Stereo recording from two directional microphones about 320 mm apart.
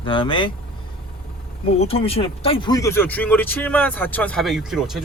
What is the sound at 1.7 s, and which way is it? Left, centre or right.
Speech, centre.